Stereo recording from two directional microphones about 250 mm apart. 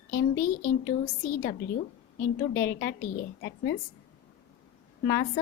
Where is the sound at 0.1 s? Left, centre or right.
Left.